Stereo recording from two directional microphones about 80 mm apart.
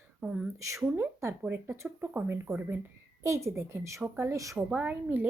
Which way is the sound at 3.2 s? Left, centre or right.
Right.